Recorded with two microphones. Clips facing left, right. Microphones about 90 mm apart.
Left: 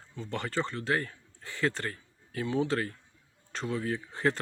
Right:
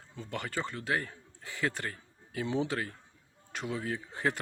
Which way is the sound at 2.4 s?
20° right (ahead or behind).